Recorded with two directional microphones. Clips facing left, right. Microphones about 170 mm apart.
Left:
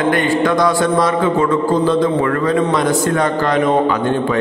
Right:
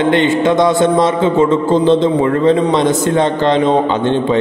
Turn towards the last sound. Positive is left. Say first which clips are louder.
# right 2 dB
turn(degrees=-25)  # may be behind; listen again after turning